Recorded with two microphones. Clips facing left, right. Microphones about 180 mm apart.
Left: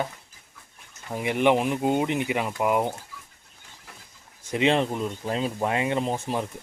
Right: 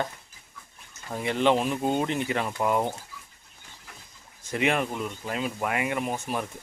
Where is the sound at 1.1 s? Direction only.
15° left (ahead or behind).